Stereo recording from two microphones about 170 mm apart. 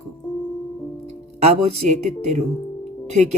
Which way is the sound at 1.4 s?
40° right (ahead or behind).